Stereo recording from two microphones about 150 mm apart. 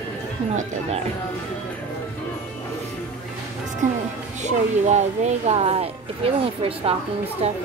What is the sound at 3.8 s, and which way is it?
Speech, 55° right (ahead or behind).